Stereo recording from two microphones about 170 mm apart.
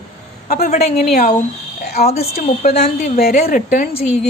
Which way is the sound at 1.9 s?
40° left (ahead or behind).